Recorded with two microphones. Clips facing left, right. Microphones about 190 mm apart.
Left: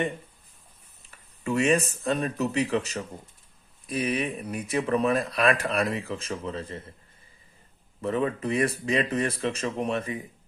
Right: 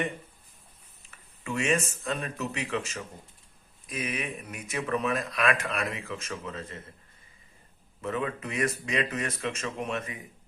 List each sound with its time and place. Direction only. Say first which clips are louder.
1.5 s speech: left 5 dB; 35° left (ahead or behind)
8.0 s speech: left 5 dB; 35° left (ahead or behind)